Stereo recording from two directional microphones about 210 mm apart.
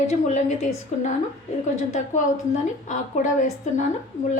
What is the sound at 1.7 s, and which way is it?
A woman's voice, 35° left (ahead or behind).